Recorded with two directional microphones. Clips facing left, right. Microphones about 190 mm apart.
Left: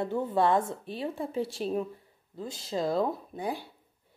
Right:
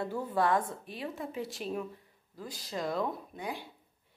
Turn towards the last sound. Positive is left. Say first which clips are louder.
# left 5 dB
turn(degrees=35)  # may be behind; listen again after turning